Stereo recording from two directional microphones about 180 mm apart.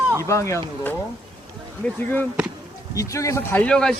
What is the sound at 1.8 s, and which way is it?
Speech, 10° left (ahead or behind).